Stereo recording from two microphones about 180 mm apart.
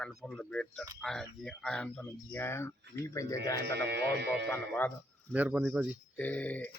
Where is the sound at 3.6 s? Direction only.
65° right (ahead or behind).